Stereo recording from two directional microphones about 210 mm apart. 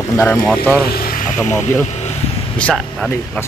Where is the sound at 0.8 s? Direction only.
45° left (ahead or behind).